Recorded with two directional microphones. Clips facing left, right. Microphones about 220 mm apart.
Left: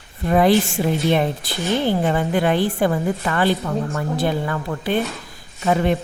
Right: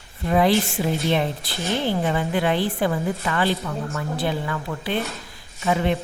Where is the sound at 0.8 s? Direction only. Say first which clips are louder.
Left 3 dB; 35° left (ahead or behind).